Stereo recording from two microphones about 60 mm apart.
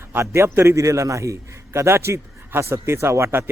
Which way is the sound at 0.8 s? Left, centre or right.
Right.